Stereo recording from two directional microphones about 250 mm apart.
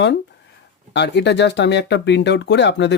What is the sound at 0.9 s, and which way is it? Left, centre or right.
Speech, left.